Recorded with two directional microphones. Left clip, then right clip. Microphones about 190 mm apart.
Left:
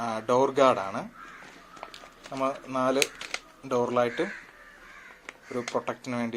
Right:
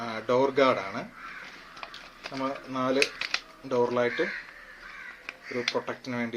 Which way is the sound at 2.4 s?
45° left (ahead or behind).